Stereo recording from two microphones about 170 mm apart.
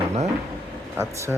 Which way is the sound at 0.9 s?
15° right (ahead or behind).